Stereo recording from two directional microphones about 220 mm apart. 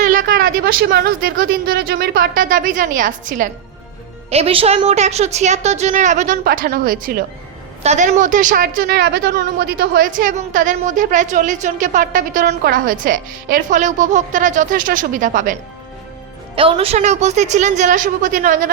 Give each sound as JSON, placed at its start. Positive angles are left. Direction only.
{"t": 0.0, "sound": "a woman's voice", "side_deg": -40}
{"t": 16.6, "sound": "a woman's voice", "side_deg": -25}